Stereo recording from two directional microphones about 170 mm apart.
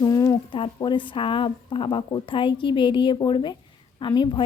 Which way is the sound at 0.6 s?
30° left (ahead or behind).